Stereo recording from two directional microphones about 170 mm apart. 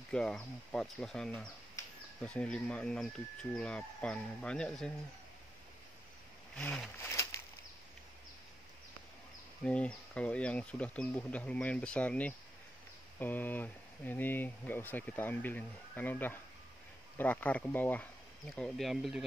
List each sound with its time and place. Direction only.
0.1 s speech: 5° left (ahead or behind)
6.5 s speech: 5° left (ahead or behind)
7.0 s a sound: 15° left (ahead or behind)
9.7 s speech: 5° left (ahead or behind)
18.6 s speech: centre (ahead or behind)